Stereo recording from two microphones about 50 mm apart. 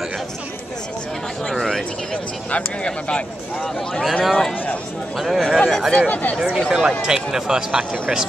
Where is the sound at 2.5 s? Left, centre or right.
Left.